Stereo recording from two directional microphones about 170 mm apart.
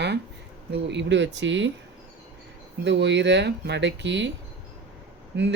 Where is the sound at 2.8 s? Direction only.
90° right.